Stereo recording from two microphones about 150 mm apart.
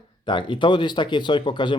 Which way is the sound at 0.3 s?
30° left (ahead or behind).